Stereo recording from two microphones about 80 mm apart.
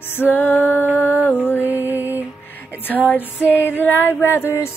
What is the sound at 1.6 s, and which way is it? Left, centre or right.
Music, right.